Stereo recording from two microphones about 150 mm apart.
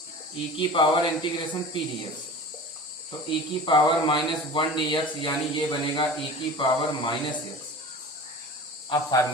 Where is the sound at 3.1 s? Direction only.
35° left (ahead or behind).